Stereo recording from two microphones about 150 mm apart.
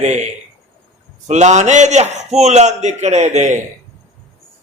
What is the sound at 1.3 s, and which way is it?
A man's voice, 50° right (ahead or behind).